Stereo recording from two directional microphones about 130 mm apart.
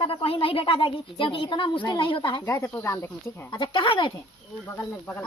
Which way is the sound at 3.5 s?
40° left (ahead or behind).